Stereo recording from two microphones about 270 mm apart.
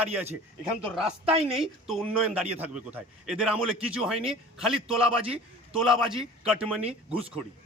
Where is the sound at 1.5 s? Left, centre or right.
Centre.